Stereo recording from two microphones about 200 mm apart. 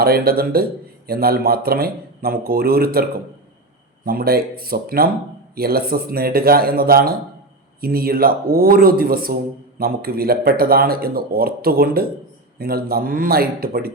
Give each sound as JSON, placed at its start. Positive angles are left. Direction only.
{"t": 0.0, "sound": "a man's voice", "side_deg": -50}